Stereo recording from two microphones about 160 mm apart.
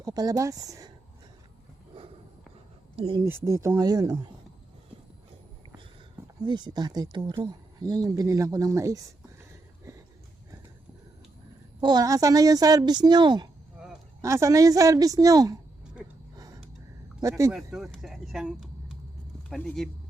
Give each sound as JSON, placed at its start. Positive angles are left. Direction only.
{"t": 0.0, "sound": "speech", "side_deg": -25}
{"t": 2.9, "sound": "speech", "side_deg": -40}
{"t": 3.2, "sound": "speech", "side_deg": -15}
{"t": 6.4, "sound": "speech", "side_deg": -30}
{"t": 9.9, "sound": "a sound", "side_deg": -20}
{"t": 11.8, "sound": "speech", "side_deg": -25}
{"t": 17.2, "sound": "speech", "side_deg": -20}
{"t": 17.5, "sound": "speech", "side_deg": -5}